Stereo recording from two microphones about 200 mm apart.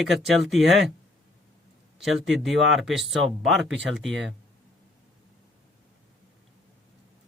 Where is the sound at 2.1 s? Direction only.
Centre (ahead or behind).